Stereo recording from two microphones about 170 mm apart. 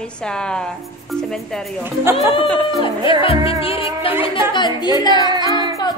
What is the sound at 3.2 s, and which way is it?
Music, 35° left (ahead or behind).